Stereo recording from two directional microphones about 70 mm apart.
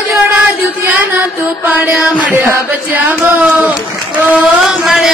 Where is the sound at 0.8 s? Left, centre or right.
Right.